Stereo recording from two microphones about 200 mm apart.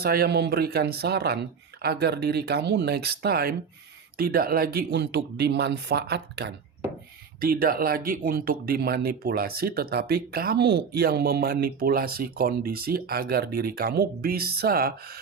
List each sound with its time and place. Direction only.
0.0 s speech: 50° right (ahead or behind)
7.4 s speech: 45° right (ahead or behind)